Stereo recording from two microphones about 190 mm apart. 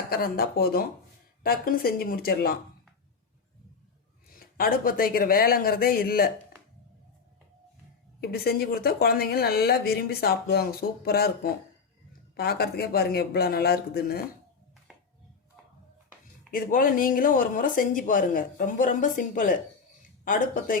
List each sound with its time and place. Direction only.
0.1 s speech: 50° left (ahead or behind)
4.4 s speech: 50° left (ahead or behind)
8.2 s speech: 55° left (ahead or behind)
14.9 s a sound: 5° right (ahead or behind)
16.5 s speech: 45° left (ahead or behind)